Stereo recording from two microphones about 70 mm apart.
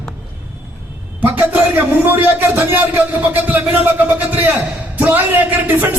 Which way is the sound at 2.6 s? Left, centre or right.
Right.